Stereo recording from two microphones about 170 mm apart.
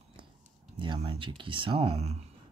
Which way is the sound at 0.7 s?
30° right (ahead or behind).